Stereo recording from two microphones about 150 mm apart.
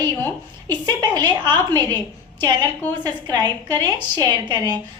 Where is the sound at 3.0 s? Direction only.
25° right (ahead or behind).